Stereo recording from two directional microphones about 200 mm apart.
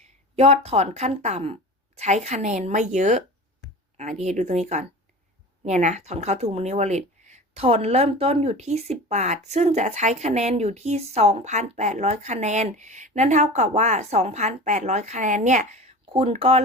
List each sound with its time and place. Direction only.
0.3 s speech: 30° right (ahead or behind)